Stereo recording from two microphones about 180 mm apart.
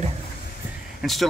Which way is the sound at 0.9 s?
Centre (ahead or behind).